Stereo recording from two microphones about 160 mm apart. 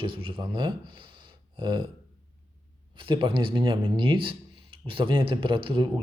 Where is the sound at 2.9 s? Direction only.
30° right (ahead or behind).